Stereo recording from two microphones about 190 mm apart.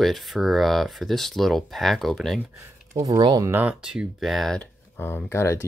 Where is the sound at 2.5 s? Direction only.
15° right (ahead or behind).